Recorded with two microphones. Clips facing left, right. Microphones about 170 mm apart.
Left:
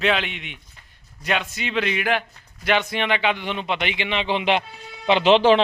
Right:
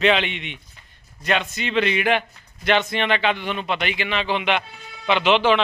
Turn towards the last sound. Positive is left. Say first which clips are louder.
# left 3 dB
turn(degrees=35)  # may be behind; listen again after turning